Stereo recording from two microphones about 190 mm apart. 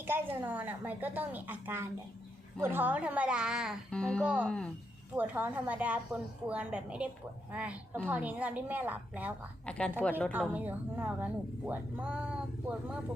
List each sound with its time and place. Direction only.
0.0 s speech: 10° right (ahead or behind); by 4.7 s 5° left (ahead or behind)
5.1 s speech: 10° right (ahead or behind)
9.6 s a woman's voice: 5° left (ahead or behind)
10.5 s speech: 10° right (ahead or behind)